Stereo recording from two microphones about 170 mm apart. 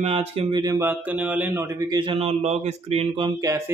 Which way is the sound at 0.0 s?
35° right (ahead or behind).